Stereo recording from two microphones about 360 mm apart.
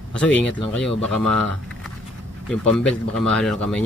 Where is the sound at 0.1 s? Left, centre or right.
Centre.